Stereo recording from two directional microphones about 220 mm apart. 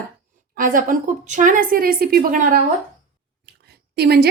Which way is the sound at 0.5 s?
40° right (ahead or behind).